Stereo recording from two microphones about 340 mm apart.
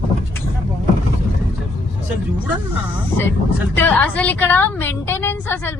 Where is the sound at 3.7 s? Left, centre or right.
Centre.